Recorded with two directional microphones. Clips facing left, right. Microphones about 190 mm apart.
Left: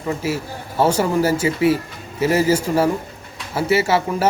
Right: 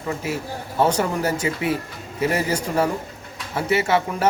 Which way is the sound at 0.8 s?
5° left (ahead or behind).